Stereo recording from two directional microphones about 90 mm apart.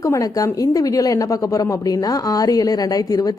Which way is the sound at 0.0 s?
40° left (ahead or behind).